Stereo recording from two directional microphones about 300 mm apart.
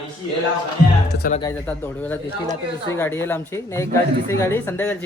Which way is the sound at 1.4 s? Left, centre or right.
Centre.